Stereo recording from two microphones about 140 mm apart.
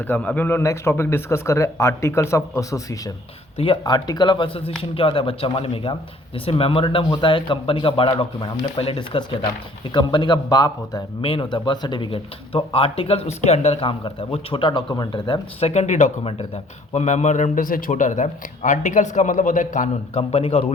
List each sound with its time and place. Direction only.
0.0 s a man's voice: 10° left (ahead or behind)
3.6 s speech: 35° left (ahead or behind)
15.7 s a man's voice: 55° left (ahead or behind)
20.3 s speech: 45° left (ahead or behind)